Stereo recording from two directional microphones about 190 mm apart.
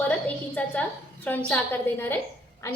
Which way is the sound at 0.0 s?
10° left (ahead or behind).